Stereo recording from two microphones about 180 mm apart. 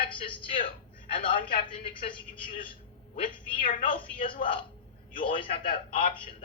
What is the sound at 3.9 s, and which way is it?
A man's voice, 30° left (ahead or behind).